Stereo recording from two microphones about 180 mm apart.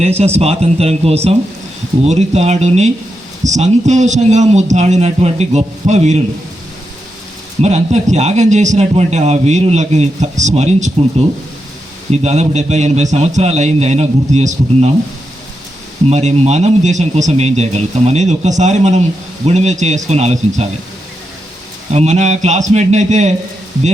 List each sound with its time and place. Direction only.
0.0 s a man's voice: 35° right (ahead or behind)
7.6 s a man's voice: 40° right (ahead or behind)
12.1 s a man's voice: 40° right (ahead or behind)
16.0 s a man's voice: 35° right (ahead or behind)
21.9 s a man's voice: 40° right (ahead or behind)